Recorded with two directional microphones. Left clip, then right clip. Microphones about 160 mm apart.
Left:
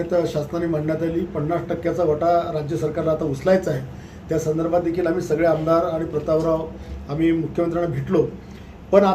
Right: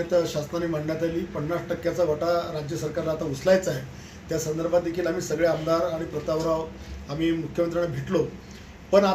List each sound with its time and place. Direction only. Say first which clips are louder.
0.1 s a man's voice: left 2 dB; centre (ahead or behind)